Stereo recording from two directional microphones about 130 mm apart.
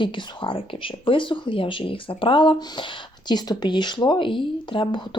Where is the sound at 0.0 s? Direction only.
40° left (ahead or behind).